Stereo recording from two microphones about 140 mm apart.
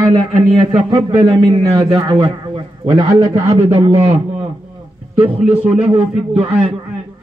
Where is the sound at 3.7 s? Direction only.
45° right (ahead or behind).